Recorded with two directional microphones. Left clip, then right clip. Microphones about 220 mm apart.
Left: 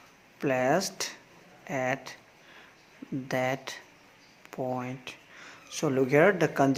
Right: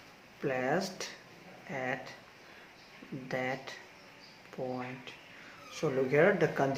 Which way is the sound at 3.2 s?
50° left (ahead or behind).